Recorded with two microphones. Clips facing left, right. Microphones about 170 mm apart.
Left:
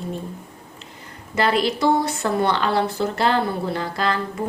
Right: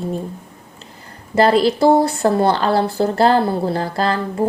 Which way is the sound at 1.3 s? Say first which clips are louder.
Right 7 dB; 35° right (ahead or behind).